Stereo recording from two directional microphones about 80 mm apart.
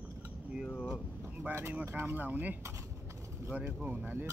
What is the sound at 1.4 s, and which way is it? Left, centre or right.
Speech, right.